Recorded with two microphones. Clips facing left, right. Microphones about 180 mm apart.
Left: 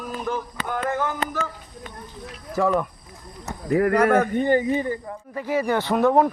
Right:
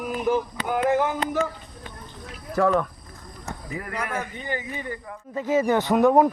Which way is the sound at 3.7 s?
65° left (ahead or behind).